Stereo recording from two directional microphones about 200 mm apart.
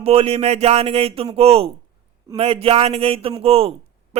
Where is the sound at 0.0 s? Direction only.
30° right (ahead or behind).